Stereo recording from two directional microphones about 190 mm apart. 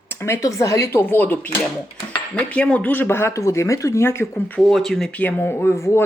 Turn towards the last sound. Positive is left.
turn(degrees=15)  # may be behind; listen again after turning